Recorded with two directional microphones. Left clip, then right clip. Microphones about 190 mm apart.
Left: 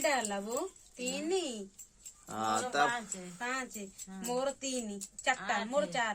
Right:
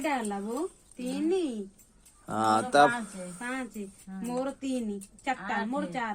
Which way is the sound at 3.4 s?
45° left (ahead or behind).